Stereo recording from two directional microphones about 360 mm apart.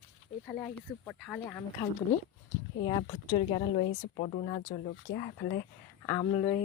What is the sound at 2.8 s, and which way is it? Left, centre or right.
Speech, centre.